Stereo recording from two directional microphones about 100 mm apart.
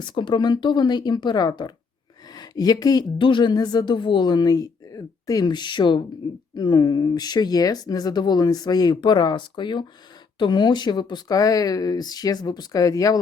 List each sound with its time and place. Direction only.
0.0 s speech: 50° left (ahead or behind)
3.2 s speech: 55° left (ahead or behind); by 13.1 s 35° left (ahead or behind)